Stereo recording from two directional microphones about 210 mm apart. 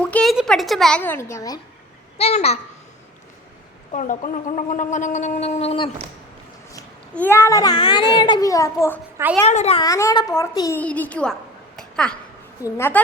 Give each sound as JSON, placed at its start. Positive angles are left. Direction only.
{"t": 0.0, "sound": "a child's voice", "side_deg": 5}
{"t": 2.1, "sound": "a child's voice", "side_deg": 30}
{"t": 3.9, "sound": "speech", "side_deg": 40}
{"t": 7.1, "sound": "a child's voice", "side_deg": 10}
{"t": 9.5, "sound": "speech", "side_deg": 30}
{"t": 9.8, "sound": "a child's voice", "side_deg": 15}
{"t": 11.8, "sound": "a sound", "side_deg": 5}
{"t": 12.6, "sound": "a child's voice", "side_deg": 10}